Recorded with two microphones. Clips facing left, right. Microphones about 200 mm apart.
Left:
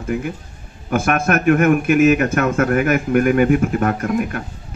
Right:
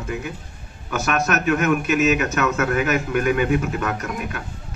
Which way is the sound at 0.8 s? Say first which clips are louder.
Left 5 dB; 50° left (ahead or behind).